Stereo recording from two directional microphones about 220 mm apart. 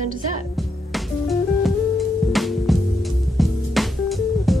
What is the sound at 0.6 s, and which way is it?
Music, centre (ahead or behind).